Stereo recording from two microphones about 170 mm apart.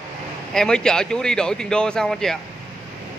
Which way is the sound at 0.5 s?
5° left (ahead or behind).